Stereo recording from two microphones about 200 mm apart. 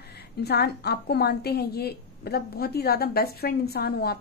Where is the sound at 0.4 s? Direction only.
55° left (ahead or behind).